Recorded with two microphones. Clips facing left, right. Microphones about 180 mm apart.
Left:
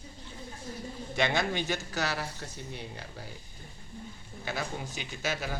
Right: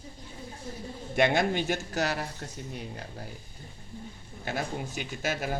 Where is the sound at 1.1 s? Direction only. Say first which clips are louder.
Right 5 dB; 55° right (ahead or behind).